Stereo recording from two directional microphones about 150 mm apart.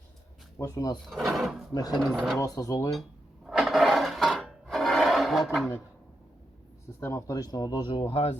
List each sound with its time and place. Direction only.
0.6 s speech: 15° left (ahead or behind)
1.1 s speech: centre (ahead or behind)
1.7 s speech: 25° left (ahead or behind)
2.0 s speech: centre (ahead or behind)
2.4 s speech: 25° left (ahead or behind)
3.4 s music: 5° right (ahead or behind)
6.8 s speech: 15° left (ahead or behind); by 8.3 s 40° left (ahead or behind)